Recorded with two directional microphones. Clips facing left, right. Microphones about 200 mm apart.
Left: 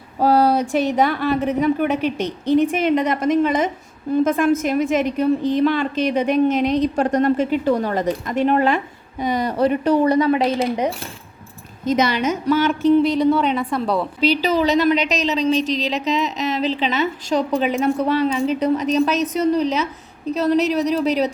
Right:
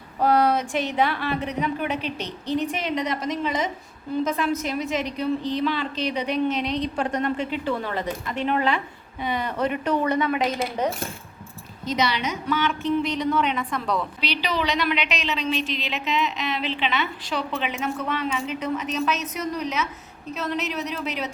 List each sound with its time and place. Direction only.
0.2 s a woman's voice: 30° left (ahead or behind)
11.9 s a woman's voice: 50° left (ahead or behind)